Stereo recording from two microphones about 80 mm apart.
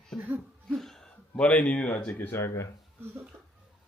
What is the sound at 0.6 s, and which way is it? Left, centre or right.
Speech, centre.